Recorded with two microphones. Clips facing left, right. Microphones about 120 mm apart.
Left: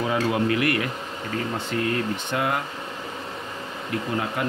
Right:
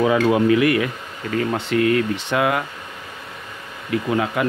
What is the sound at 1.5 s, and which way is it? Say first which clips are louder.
Speech: right 8 dB; 80° right.